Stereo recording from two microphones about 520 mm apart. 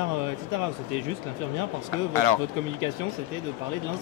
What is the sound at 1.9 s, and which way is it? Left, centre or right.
Speech, right.